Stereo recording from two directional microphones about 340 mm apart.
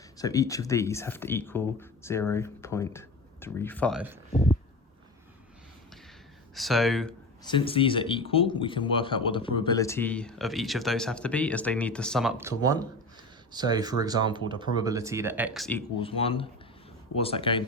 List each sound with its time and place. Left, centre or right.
0.2 s speech: centre
4.3 s speech: centre
6.5 s speech: centre
7.4 s speech: centre
16.0 s speech: centre